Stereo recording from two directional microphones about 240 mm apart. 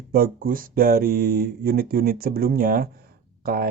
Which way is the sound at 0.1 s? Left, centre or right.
Right.